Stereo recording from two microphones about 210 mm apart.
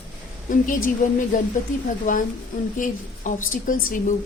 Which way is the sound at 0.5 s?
40° left (ahead or behind).